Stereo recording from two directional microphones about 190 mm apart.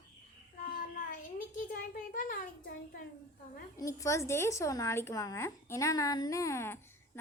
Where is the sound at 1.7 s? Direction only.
45° left (ahead or behind).